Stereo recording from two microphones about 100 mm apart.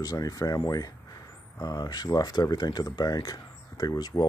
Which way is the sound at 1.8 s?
45° left (ahead or behind).